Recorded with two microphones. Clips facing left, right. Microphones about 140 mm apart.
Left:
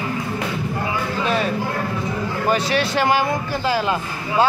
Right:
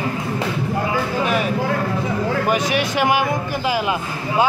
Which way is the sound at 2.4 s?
15° right (ahead or behind).